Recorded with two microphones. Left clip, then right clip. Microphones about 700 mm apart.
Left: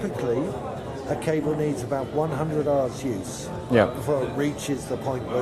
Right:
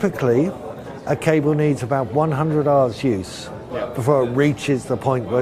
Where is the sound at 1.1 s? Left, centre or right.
Right.